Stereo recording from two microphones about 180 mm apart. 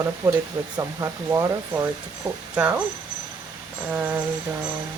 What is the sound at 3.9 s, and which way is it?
Speech, 10° right (ahead or behind).